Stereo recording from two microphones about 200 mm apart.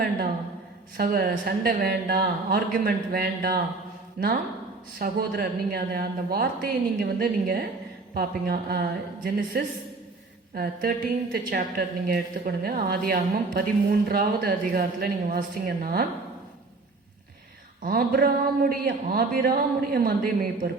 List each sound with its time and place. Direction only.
0.9 s a woman's voice: 45° right (ahead or behind)
4.9 s a woman's voice: 50° right (ahead or behind)
17.8 s a woman's voice: 45° right (ahead or behind)